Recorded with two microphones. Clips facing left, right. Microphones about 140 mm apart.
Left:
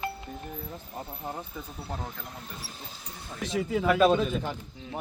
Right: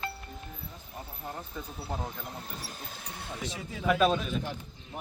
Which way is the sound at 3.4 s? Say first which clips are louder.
Left 11 dB; 90° left.